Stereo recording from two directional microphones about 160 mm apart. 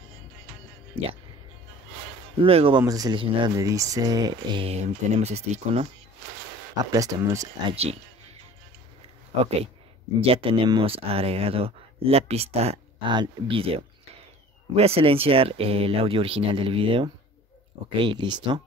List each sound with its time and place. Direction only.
2.4 s speech: 35° right (ahead or behind)
2.8 s speech: 20° right (ahead or behind); by 5.9 s 40° right (ahead or behind)
6.9 s speech: 20° right (ahead or behind)
7.7 s speech: 40° right (ahead or behind)
10.2 s speech: 35° right (ahead or behind)